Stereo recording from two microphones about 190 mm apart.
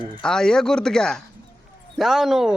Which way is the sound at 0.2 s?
5° left (ahead or behind).